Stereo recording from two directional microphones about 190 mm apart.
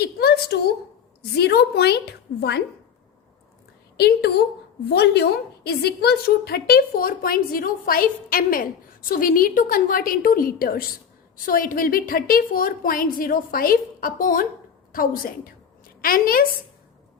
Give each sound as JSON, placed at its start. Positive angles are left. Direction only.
{"t": 0.0, "sound": "a woman's voice", "side_deg": 60}
{"t": 3.9, "sound": "a woman's voice", "side_deg": 60}